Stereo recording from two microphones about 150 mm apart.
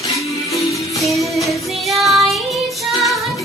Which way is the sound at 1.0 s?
Centre (ahead or behind).